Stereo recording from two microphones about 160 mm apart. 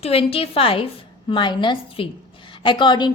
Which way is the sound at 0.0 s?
35° left (ahead or behind).